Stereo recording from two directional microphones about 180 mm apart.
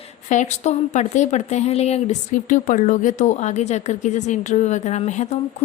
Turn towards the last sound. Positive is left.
turn(degrees=40)  # may be behind; listen again after turning